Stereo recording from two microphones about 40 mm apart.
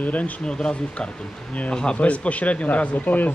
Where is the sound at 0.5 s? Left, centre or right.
Left.